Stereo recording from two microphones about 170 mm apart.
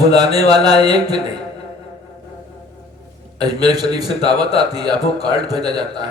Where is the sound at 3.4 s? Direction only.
25° right (ahead or behind).